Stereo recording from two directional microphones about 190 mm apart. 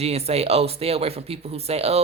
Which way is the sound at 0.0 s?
35° right (ahead or behind).